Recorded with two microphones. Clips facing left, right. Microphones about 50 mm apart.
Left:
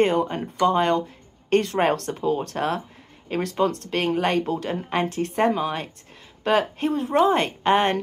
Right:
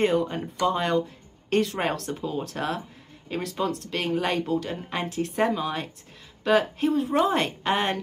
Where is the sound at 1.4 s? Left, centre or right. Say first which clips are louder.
Left 3 dB; left.